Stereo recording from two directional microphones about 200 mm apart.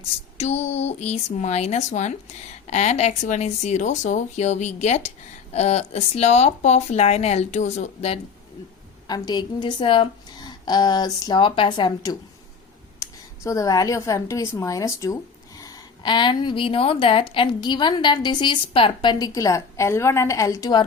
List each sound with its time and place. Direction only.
0.3 s speech: 30° left (ahead or behind)
9.0 s speech: 20° left (ahead or behind)